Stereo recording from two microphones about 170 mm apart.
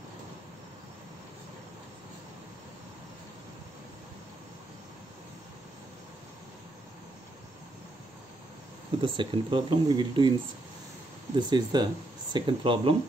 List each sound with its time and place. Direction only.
9.0 s speech: 30° right (ahead or behind)
11.3 s speech: 25° right (ahead or behind)